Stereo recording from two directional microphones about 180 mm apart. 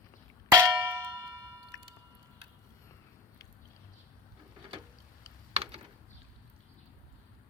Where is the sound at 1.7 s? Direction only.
20° left (ahead or behind).